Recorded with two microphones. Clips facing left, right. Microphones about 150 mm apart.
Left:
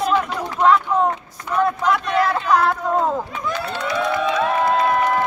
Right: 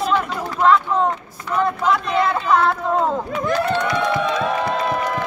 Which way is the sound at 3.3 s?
50° right (ahead or behind).